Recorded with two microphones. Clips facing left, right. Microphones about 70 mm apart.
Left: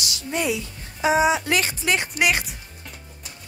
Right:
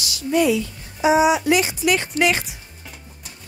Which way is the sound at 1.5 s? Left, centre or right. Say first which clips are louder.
Right 5 dB; left.